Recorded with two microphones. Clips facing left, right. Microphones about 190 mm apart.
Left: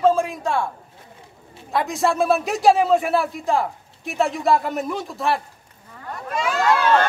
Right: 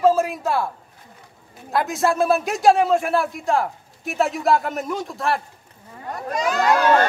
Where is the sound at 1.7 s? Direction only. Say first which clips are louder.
Even; centre (ahead or behind).